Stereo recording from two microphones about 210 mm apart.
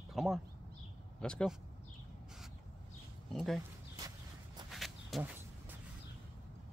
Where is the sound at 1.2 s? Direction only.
5° left (ahead or behind).